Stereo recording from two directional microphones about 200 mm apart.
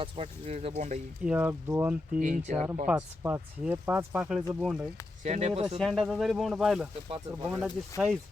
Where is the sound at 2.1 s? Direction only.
40° right (ahead or behind).